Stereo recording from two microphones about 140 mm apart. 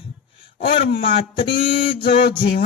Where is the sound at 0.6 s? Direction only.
40° left (ahead or behind).